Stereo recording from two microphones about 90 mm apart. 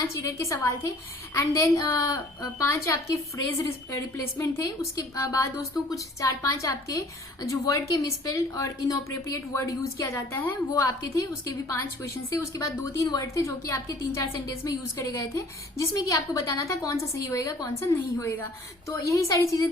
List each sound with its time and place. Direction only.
0.1 s a woman's voice: 35° left (ahead or behind)
4.9 s a woman's voice: 35° left (ahead or behind)
17.7 s a woman's voice: 30° left (ahead or behind)